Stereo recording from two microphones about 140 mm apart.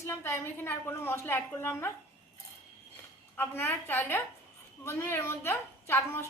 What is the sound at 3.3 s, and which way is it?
A woman's voice, 15° left (ahead or behind).